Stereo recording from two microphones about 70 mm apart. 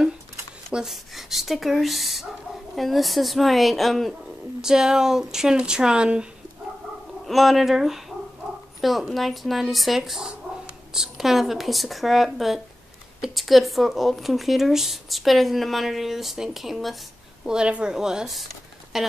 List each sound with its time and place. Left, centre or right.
0.7 s speech: centre
7.2 s speech: centre
17.5 s speech: centre